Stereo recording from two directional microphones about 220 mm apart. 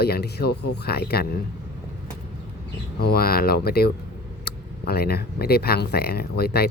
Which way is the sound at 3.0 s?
45° left (ahead or behind).